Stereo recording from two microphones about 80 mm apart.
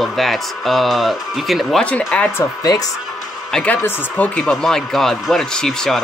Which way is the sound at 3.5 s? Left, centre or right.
Centre.